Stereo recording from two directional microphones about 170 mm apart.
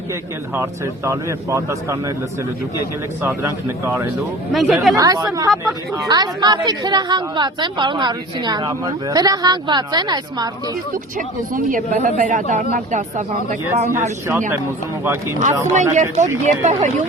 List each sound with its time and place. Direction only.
0.5 s a man's voice: 15° right (ahead or behind)
3.2 s a man's voice: 15° right (ahead or behind)
4.5 s speech: centre (ahead or behind)
4.9 s a woman's voice: 20° right (ahead or behind)
11.5 s speech: 50° right (ahead or behind)
15.0 s a man's voice: 15° right (ahead or behind)
15.6 s speech: 45° right (ahead or behind)